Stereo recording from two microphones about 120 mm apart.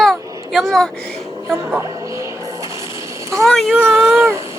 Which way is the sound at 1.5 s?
20° right (ahead or behind).